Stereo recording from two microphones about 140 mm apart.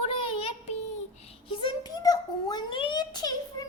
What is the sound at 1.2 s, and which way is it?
A child's voice, 35° left (ahead or behind).